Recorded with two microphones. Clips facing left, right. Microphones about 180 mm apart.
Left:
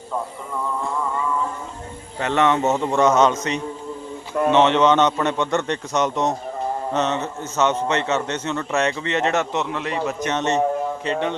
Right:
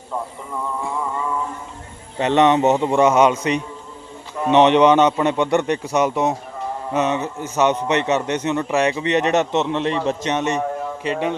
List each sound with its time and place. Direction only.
2.1 s speech: 20° right (ahead or behind)
10.2 s speech: 15° right (ahead or behind)